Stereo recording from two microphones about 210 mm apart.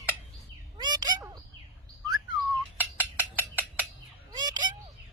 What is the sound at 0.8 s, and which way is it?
Bird, 20° right (ahead or behind).